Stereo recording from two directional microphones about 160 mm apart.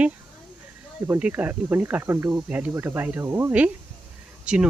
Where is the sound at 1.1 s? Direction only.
10° right (ahead or behind).